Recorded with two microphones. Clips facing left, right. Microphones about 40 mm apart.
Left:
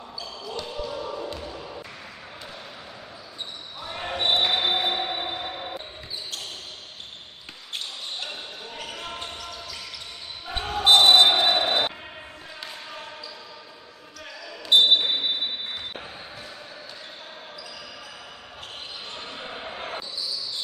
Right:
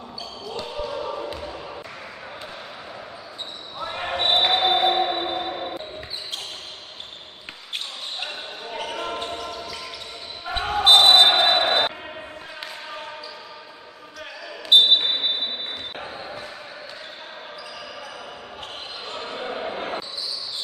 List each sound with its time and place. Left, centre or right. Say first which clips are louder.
0.6 s basketball bounce: right 3 dB; centre
3.8 s basketball bounce: right 3 dB; right
7.7 s basketball bounce: right 2 dB; centre
14.7 s basketball bounce: right 2 dB; right
19.1 s basketball bounce: right 9 dB; right